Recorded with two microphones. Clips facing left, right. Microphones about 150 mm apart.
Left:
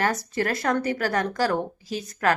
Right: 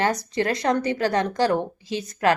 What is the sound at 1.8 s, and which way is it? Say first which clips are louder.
Speech: right 3 dB; centre (ahead or behind).